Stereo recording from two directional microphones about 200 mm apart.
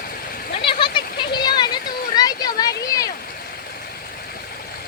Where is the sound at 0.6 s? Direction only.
25° left (ahead or behind).